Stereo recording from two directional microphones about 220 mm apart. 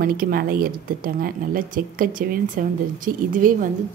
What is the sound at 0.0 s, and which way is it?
Speech, 40° right (ahead or behind).